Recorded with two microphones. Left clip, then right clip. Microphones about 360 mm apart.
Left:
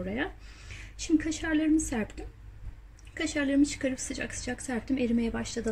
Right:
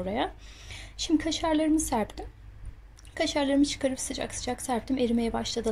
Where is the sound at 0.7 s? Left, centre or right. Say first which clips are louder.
Right 1 dB; centre.